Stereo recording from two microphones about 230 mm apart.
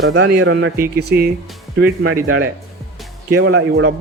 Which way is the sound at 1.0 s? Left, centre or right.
Right.